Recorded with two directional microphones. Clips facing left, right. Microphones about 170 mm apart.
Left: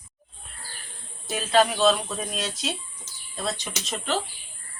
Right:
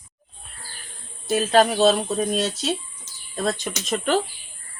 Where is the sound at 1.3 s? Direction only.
40° right (ahead or behind).